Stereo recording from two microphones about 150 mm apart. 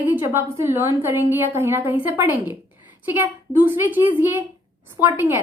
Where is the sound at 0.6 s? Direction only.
15° right (ahead or behind).